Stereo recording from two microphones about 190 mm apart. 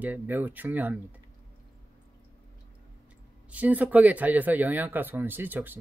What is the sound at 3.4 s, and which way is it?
Speech, 10° right (ahead or behind).